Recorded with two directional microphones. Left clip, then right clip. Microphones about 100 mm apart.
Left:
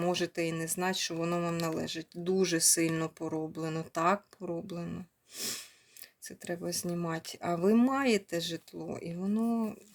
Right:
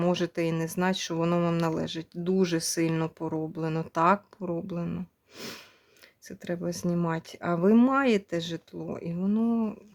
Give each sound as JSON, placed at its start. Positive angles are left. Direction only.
{"t": 0.0, "sound": "speech", "side_deg": -45}